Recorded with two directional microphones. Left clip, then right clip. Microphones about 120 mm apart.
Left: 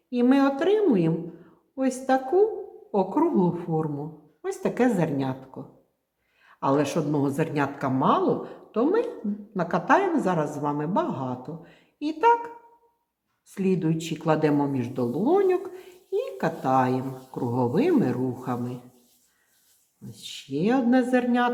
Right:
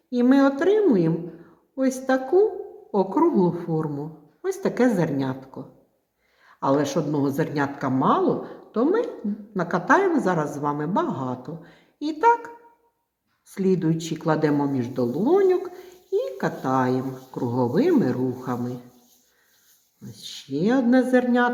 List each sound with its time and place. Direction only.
0.1 s speech: 15° left (ahead or behind)
13.5 s speech: 15° left (ahead or behind)
20.1 s speech: 20° left (ahead or behind)